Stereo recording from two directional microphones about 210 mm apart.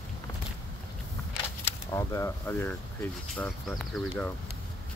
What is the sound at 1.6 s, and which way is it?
Speech, 15° left (ahead or behind).